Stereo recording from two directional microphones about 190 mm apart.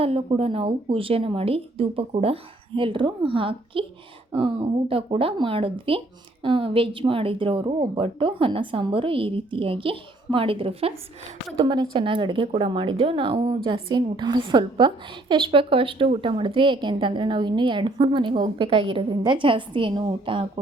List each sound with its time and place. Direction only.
0.0 s a woman's voice: 30° right (ahead or behind)